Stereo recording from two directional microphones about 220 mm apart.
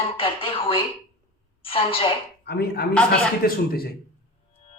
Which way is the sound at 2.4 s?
45° left (ahead or behind).